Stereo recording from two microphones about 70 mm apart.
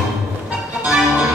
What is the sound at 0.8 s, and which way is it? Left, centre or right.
Music, centre.